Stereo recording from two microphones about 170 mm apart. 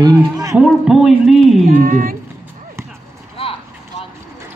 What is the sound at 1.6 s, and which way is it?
Speech, 55° right (ahead or behind).